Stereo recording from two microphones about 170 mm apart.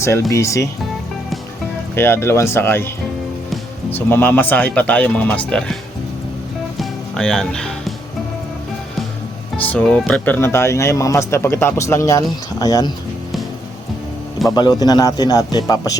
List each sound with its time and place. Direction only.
0.0 s speech: 15° left (ahead or behind)
2.0 s speech: 15° left (ahead or behind)
6.7 s music: centre (ahead or behind)
9.6 s speech: 10° left (ahead or behind)
14.5 s speech: 25° left (ahead or behind)